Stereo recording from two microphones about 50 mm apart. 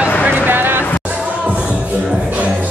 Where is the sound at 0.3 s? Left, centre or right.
Right.